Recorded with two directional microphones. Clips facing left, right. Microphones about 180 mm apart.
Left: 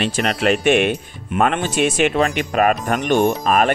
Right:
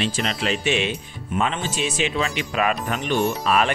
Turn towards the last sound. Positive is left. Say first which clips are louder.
# left 4 dB
turn(degrees=45)  # may be behind; listen again after turning